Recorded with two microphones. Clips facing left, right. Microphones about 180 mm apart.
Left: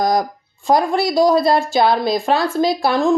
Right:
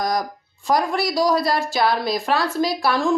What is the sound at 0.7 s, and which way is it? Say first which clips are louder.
A woman's voice: left 4 dB; 25° left (ahead or behind).